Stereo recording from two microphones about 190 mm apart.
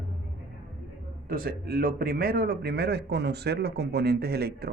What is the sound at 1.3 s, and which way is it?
A man's voice, 50° right (ahead or behind).